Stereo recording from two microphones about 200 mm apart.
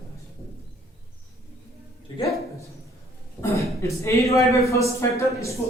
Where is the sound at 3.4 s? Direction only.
15° left (ahead or behind).